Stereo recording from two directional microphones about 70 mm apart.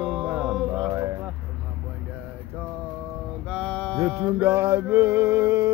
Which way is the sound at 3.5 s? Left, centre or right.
Centre.